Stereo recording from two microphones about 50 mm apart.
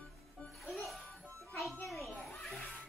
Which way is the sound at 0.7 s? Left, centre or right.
Centre.